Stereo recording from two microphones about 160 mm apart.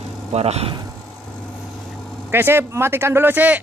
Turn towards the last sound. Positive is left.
turn(degrees=-10)  # may be behind; listen again after turning